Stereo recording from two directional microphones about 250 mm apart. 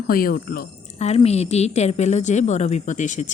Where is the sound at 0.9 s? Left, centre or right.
Left.